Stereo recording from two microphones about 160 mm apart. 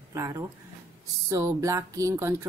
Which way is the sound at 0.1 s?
20° right (ahead or behind).